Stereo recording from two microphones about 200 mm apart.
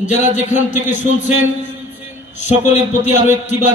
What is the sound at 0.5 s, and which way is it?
Speech, 35° left (ahead or behind).